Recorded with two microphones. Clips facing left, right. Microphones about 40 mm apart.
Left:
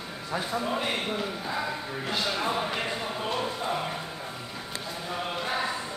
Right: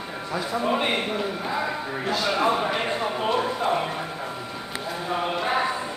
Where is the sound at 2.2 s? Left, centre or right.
Right.